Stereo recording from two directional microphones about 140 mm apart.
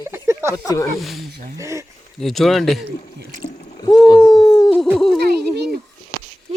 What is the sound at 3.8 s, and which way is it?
Speech, 30° left (ahead or behind).